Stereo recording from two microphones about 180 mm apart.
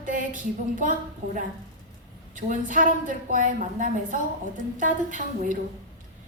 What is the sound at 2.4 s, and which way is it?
A woman's voice, 45° right (ahead or behind).